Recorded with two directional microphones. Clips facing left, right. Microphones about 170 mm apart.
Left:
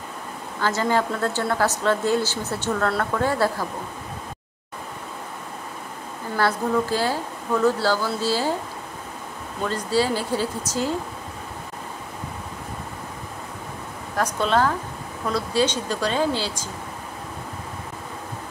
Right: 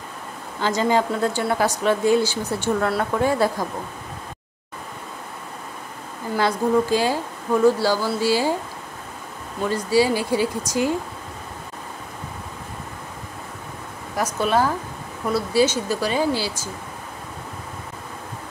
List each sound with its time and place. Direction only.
0.6 s a woman's voice: 15° right (ahead or behind)
6.3 s a woman's voice: 15° right (ahead or behind)
9.7 s a woman's voice: 10° right (ahead or behind)
14.1 s a woman's voice: 10° right (ahead or behind)